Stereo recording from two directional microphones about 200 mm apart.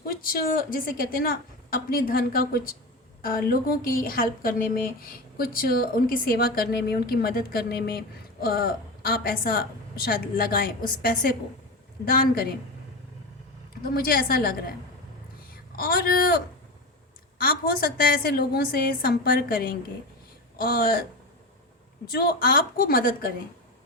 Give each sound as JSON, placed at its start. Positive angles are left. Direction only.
{"t": 0.0, "sound": "speech", "side_deg": 45}
{"t": 13.8, "sound": "speech", "side_deg": 50}
{"t": 15.7, "sound": "speech", "side_deg": 45}
{"t": 22.1, "sound": "speech", "side_deg": 45}